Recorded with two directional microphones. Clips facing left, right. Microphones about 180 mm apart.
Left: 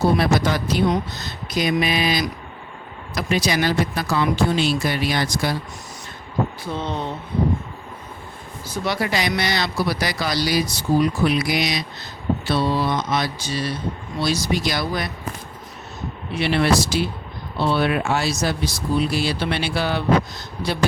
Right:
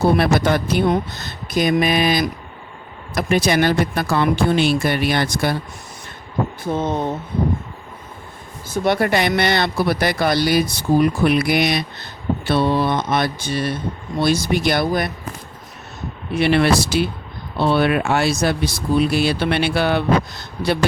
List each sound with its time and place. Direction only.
0.2 s speech: 55° right (ahead or behind)
6.7 s speech: 50° right (ahead or behind)
8.6 s speech: 50° right (ahead or behind)
16.3 s speech: 55° right (ahead or behind)